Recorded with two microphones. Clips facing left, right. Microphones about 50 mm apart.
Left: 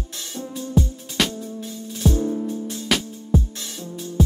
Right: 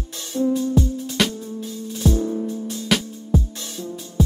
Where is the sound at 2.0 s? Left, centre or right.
Left.